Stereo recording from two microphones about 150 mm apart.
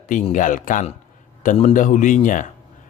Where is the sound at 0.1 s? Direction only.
60° left (ahead or behind).